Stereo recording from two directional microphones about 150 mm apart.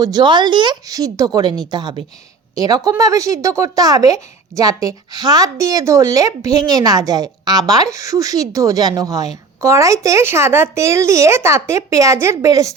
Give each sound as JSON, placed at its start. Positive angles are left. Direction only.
{"t": 0.0, "sound": "a woman's voice", "side_deg": -30}